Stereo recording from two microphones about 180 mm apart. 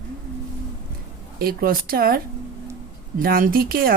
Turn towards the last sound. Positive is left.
turn(degrees=-55)  # may be behind; listen again after turning